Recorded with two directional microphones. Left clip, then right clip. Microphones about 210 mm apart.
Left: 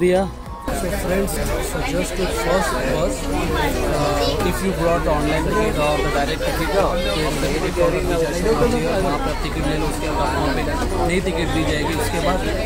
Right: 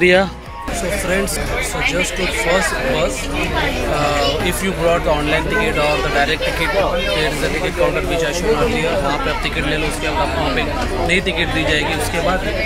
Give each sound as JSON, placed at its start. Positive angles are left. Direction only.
{"t": 0.0, "sound": "speech", "side_deg": 5}